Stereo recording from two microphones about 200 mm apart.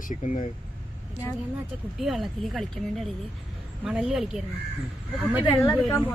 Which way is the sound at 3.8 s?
5° right (ahead or behind).